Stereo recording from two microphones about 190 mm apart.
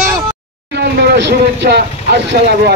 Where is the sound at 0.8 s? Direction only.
65° right (ahead or behind).